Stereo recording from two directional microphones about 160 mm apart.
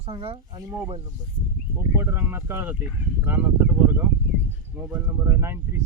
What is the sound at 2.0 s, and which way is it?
Speech, 15° right (ahead or behind).